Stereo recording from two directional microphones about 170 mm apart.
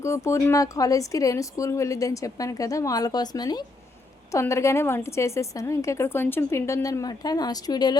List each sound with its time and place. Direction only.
0.0 s a woman's voice: 15° left (ahead or behind)